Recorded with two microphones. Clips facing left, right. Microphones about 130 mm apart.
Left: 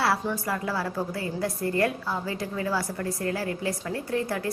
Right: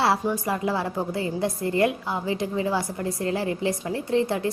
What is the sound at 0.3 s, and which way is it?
A woman's voice, 20° right (ahead or behind).